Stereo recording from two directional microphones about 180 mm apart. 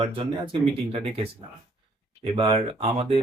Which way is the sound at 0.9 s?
30° right (ahead or behind).